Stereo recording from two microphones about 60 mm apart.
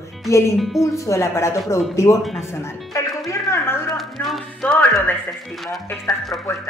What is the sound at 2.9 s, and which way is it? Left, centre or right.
Music, left.